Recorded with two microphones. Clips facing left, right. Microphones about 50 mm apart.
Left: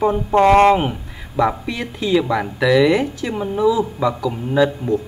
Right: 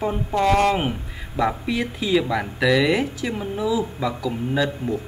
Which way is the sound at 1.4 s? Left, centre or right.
Centre.